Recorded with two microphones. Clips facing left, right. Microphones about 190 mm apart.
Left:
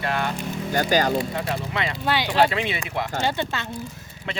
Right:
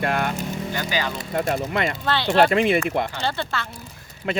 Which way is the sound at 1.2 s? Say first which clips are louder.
Right 3 dB; 45° right (ahead or behind).